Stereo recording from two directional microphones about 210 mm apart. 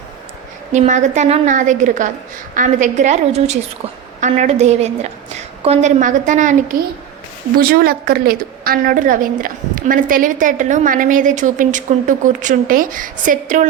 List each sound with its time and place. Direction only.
0.7 s a woman's voice: 35° right (ahead or behind)